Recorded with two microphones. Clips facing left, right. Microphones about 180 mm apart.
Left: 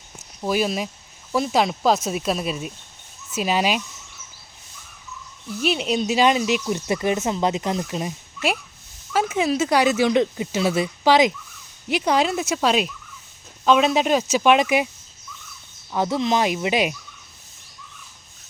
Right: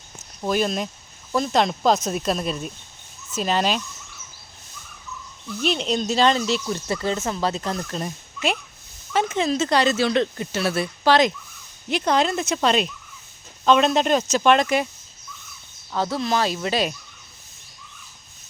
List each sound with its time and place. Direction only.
0.4 s speech: 5° left (ahead or behind)
5.6 s speech: 5° left (ahead or behind)
15.9 s speech: 20° left (ahead or behind)